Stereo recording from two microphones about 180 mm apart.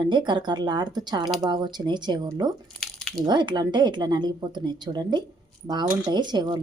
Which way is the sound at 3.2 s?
25° right (ahead or behind).